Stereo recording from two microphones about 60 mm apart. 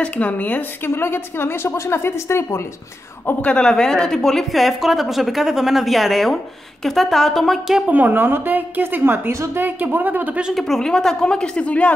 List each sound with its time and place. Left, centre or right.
0.0 s a woman's voice: left
0.8 s a woman's voice: left
3.4 s a woman's voice: centre
7.9 s a woman's voice: right
10.5 s a woman's voice: centre; by 11.9 s left